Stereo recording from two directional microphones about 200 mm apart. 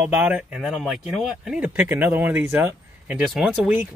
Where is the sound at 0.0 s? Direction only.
5° right (ahead or behind).